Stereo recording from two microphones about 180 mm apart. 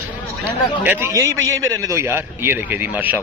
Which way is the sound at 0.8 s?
15° right (ahead or behind).